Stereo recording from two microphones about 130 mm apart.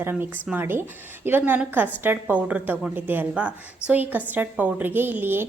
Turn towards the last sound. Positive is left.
turn(degrees=-15)  # may be behind; listen again after turning